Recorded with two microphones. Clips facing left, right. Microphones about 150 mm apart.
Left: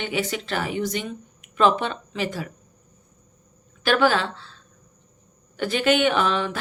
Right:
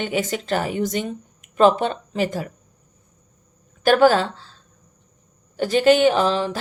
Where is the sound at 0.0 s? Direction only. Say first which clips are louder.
Right 3 dB; 45° right (ahead or behind).